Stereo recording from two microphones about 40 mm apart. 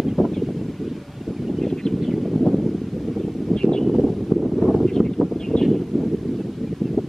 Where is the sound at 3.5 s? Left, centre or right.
Centre.